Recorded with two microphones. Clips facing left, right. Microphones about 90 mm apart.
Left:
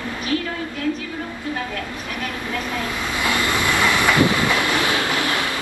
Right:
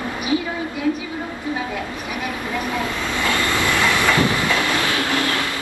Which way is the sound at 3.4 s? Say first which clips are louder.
Left 1 dB; 15° left (ahead or behind).